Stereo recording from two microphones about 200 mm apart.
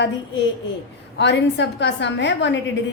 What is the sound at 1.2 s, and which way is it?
A woman's voice, 60° left (ahead or behind).